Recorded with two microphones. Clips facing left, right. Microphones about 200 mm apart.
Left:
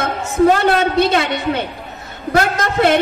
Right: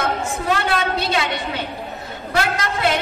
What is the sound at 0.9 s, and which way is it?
A woman's voice, 55° left (ahead or behind).